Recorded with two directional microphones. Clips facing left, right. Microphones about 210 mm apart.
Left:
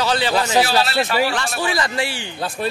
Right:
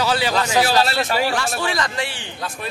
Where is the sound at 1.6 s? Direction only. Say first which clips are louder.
Left 2 dB; 5° left (ahead or behind).